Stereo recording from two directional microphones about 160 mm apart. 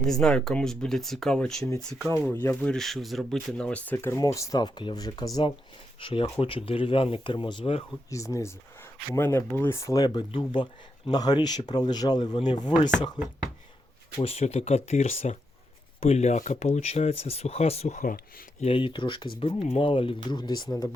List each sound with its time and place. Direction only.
0.0 s speech: 5° left (ahead or behind); by 7.9 s 35° left (ahead or behind)
8.1 s speech: 20° left (ahead or behind)
14.2 s speech: 40° left (ahead or behind)
18.6 s speech: 35° left (ahead or behind)